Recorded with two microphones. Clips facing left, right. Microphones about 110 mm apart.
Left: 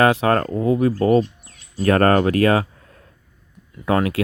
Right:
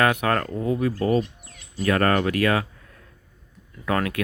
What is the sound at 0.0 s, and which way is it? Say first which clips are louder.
Speech: left 5 dB; 30° left (ahead or behind).